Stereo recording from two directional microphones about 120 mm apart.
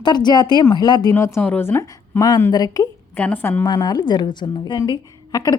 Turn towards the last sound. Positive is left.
turn(degrees=30)  # may be behind; listen again after turning